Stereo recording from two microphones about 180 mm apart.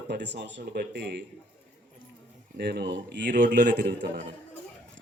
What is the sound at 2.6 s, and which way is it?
A man's voice, 70° right (ahead or behind).